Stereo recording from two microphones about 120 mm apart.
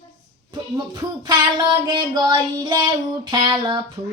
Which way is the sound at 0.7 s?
35° right (ahead or behind).